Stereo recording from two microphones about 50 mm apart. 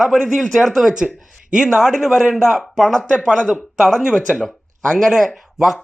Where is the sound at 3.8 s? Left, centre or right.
Centre.